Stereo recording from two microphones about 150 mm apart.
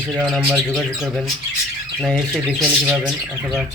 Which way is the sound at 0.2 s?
Centre (ahead or behind).